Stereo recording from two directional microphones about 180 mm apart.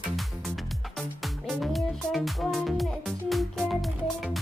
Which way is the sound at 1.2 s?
Centre (ahead or behind).